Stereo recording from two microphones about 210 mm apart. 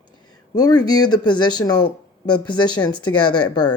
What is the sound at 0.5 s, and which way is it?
Speech, 20° left (ahead or behind).